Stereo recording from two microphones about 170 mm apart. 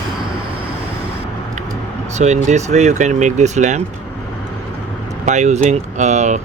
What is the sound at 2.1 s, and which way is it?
Speech, 45° right (ahead or behind).